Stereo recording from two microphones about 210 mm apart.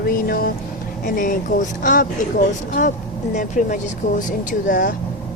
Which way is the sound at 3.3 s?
35° left (ahead or behind).